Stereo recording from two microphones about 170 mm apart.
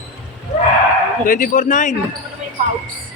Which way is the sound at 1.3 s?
55° left (ahead or behind).